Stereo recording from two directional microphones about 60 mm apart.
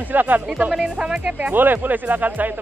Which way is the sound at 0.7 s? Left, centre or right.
Centre.